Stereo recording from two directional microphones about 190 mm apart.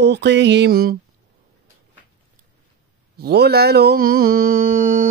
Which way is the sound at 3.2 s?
55° right (ahead or behind).